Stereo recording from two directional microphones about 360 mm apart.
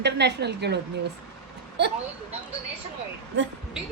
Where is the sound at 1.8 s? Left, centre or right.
Right.